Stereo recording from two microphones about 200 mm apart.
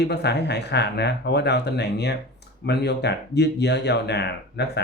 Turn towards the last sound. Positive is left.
turn(degrees=55)  # may be behind; listen again after turning